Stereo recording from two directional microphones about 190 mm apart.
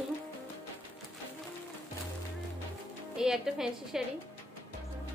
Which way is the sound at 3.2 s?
5° right (ahead or behind).